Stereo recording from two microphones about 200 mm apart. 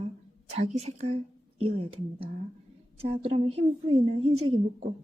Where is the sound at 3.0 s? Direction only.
30° right (ahead or behind).